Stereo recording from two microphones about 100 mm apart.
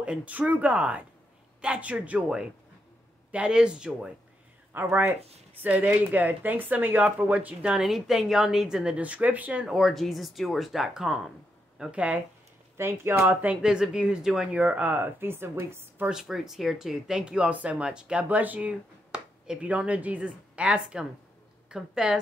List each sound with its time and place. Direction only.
0.0 s a woman's voice: 10° right (ahead or behind)
4.7 s a woman's voice: 20° right (ahead or behind)
12.7 s a woman's voice: 25° right (ahead or behind)
16.1 s a woman's voice: 5° right (ahead or behind)